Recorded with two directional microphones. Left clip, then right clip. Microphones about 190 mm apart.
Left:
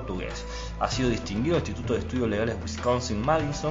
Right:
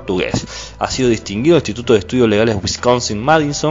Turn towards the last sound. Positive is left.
turn(degrees=-50)  # may be behind; listen again after turning